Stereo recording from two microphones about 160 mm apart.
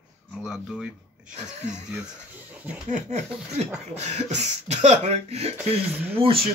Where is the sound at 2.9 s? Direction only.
45° right (ahead or behind).